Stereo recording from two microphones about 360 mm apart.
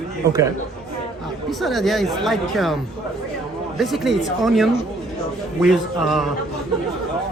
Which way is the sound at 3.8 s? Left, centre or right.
Centre.